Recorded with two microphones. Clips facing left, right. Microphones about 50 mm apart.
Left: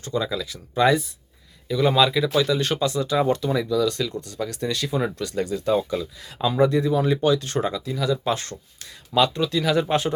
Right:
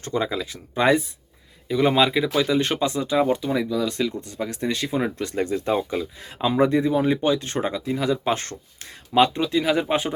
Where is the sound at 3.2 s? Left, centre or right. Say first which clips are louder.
Right 1 dB; centre.